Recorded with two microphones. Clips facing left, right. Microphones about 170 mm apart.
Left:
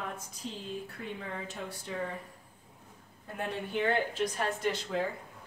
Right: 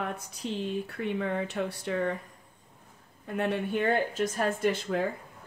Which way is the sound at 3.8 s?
45° right (ahead or behind).